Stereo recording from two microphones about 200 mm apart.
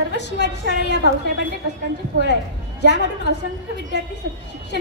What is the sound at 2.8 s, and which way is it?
Speech, 60° left (ahead or behind).